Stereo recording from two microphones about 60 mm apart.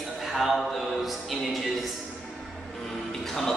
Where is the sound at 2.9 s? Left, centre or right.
Centre.